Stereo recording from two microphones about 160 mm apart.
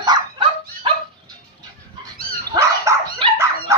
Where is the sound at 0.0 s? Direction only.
30° right (ahead or behind).